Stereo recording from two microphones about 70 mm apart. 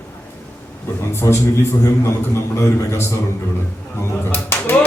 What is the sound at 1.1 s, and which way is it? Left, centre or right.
A man's voice, left.